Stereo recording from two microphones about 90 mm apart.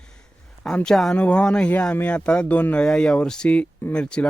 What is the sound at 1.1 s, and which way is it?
Speech, 15° left (ahead or behind).